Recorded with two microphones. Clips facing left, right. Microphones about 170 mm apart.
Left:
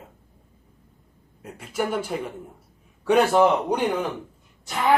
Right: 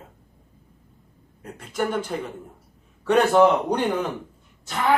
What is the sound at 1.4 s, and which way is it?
Speech, 5° left (ahead or behind).